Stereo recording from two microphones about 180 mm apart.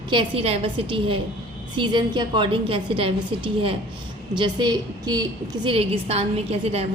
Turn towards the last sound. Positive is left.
turn(degrees=-35)  # may be behind; listen again after turning